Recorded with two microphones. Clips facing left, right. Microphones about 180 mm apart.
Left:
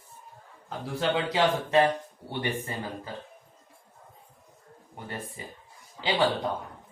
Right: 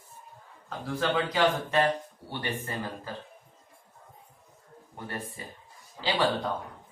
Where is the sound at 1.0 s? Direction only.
25° left (ahead or behind).